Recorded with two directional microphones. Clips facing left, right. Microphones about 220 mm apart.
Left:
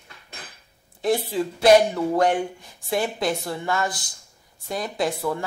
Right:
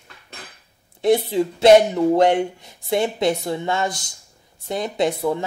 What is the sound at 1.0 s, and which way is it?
Speech, 25° right (ahead or behind).